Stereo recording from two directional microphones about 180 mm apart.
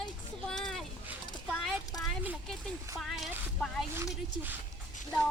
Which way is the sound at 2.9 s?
Centre (ahead or behind).